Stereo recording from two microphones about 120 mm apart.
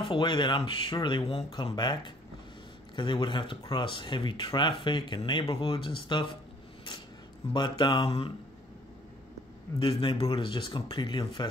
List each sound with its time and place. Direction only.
0.0 s speech: 40° left (ahead or behind)
7.5 s speech: 40° left (ahead or behind)
9.8 s speech: 45° left (ahead or behind)